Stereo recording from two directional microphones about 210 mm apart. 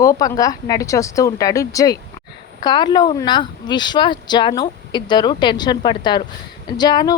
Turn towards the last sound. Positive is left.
turn(degrees=20)  # may be behind; listen again after turning